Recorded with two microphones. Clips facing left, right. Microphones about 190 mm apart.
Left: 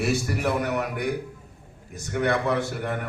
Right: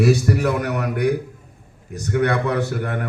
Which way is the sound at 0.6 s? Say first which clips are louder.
Right 4 dB; 65° right (ahead or behind).